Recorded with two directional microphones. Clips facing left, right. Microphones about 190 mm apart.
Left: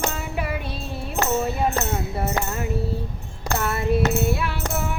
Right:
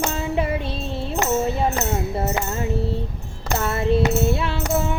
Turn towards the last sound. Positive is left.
turn(degrees=-25)  # may be behind; listen again after turning